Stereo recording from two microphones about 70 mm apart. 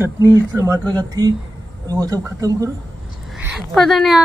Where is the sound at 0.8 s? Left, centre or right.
Right.